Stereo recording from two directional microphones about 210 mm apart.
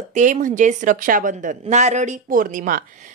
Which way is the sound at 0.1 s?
35° right (ahead or behind).